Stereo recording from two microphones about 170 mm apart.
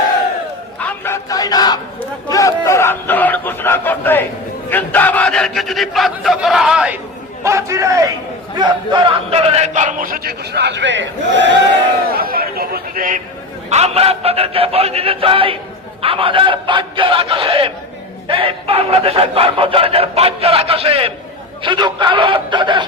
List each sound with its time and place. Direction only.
0.8 s crowd: 10° left (ahead or behind)
2.3 s a sound: 20° left (ahead or behind)
4.7 s a man's voice: 10° left (ahead or behind); by 7.0 s 5° right (ahead or behind)
7.4 s a man's voice: 15° right (ahead or behind); by 11.5 s 90° right
12.0 s a man's voice: 60° right (ahead or behind)
13.7 s a man's voice: 40° right (ahead or behind)